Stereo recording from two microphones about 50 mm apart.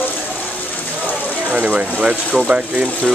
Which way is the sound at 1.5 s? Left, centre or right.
Right.